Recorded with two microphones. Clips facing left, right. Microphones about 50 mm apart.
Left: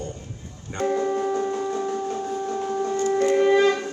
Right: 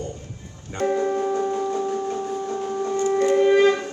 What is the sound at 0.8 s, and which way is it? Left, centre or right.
Music, right.